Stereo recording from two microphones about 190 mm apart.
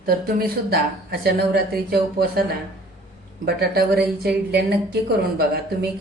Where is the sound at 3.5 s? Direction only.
55° right (ahead or behind).